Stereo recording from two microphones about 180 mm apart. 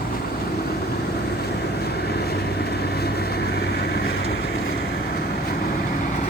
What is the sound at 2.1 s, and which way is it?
Vehicle, 65° left (ahead or behind).